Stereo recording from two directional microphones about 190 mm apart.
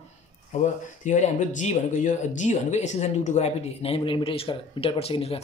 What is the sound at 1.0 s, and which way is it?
Speech, 40° left (ahead or behind).